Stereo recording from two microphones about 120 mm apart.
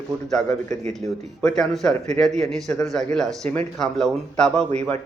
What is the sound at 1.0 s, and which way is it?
A man's voice, 5° left (ahead or behind).